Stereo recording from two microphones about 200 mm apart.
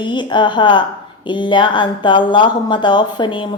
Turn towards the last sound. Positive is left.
turn(degrees=25)  # may be behind; listen again after turning